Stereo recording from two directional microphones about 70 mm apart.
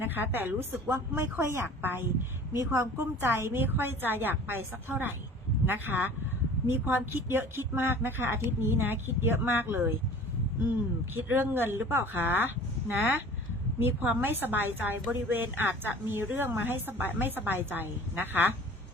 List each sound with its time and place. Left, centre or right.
0.0 s speech: right
2.5 s a woman's voice: right
3.2 s a woman's voice: right
11.1 s speech: right
13.7 s a woman's voice: right